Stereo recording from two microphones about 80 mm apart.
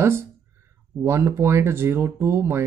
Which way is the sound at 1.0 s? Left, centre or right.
Right.